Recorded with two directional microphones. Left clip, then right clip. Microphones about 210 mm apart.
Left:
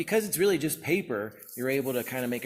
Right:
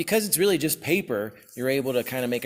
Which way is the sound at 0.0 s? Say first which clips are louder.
Right 3 dB; 40° right (ahead or behind).